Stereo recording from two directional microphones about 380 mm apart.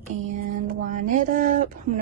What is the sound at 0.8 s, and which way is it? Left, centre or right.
Speech, centre.